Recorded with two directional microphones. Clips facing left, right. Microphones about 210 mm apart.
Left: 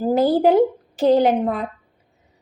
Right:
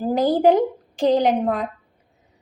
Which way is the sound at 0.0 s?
5° left (ahead or behind).